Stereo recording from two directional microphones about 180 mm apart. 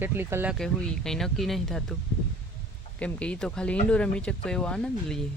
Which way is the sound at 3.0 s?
5° left (ahead or behind).